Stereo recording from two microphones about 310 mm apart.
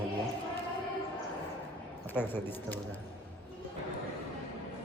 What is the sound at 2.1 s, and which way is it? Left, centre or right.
Speech, centre.